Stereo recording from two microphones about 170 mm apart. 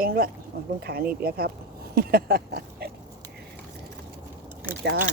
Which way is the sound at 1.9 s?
65° right (ahead or behind).